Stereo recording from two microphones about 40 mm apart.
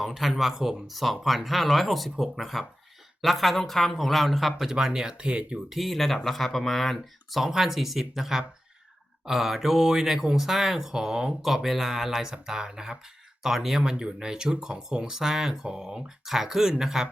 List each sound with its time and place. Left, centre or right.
0.1 s speech: centre
4.7 s speech: centre
5.6 s speech: centre
11.4 s speech: centre
13.4 s speech: centre
13.9 s speech: centre